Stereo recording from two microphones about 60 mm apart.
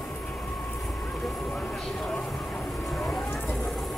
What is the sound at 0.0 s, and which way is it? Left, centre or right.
Train, left.